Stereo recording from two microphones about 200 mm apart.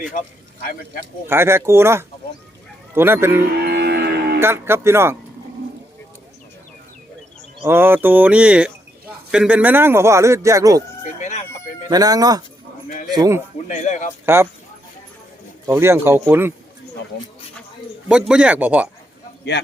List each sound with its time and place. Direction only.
1.3 s speech: 10° right (ahead or behind)
3.6 s moo: 55° right (ahead or behind)
4.4 s speech: 10° right (ahead or behind)
7.6 s speech: 10° right (ahead or behind)
11.0 s chicken: 35° left (ahead or behind)
11.9 s speech: 20° right (ahead or behind)
13.7 s a man's voice: 35° left (ahead or behind)
15.6 s speech: 15° right (ahead or behind)
17.1 s speech: 55° left (ahead or behind)
18.1 s speech: 5° right (ahead or behind)